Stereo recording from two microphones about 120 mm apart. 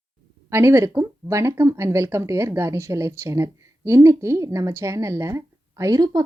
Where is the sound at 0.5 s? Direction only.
25° right (ahead or behind).